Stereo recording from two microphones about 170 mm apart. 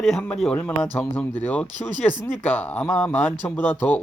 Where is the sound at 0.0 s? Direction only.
5° left (ahead or behind).